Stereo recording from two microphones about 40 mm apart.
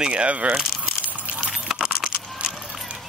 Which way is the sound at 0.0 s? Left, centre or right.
Right.